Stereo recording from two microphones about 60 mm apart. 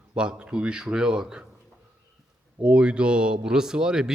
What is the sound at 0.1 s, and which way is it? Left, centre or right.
Speech, centre.